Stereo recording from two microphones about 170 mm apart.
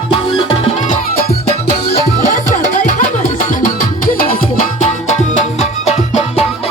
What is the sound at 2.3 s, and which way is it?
Music, 50° left (ahead or behind).